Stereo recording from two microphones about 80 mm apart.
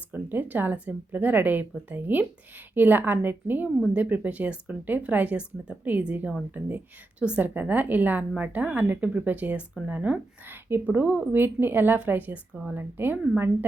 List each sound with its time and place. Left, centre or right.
0.1 s a woman's voice: right